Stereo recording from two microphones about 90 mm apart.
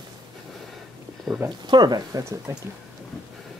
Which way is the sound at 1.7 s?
50° right (ahead or behind).